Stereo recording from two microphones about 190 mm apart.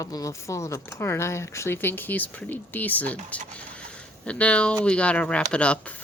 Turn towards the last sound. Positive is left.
turn(degrees=5)  # may be behind; listen again after turning